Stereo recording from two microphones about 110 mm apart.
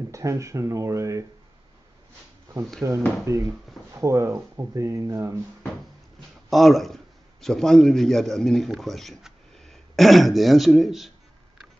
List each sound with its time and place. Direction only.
0.1 s speech: 30° right (ahead or behind)
2.8 s speech: 25° right (ahead or behind)
6.5 s speech: centre (ahead or behind)